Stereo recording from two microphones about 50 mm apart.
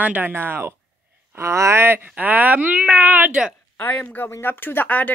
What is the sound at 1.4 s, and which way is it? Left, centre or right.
Speech, right.